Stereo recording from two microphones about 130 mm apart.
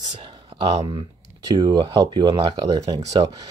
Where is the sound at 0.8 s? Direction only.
45° right (ahead or behind).